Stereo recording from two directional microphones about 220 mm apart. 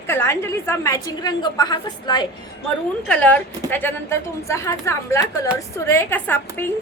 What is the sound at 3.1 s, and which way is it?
A woman's voice, 5° left (ahead or behind).